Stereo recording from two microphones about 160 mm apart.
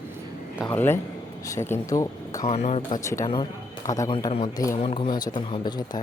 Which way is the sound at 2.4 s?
45° left (ahead or behind).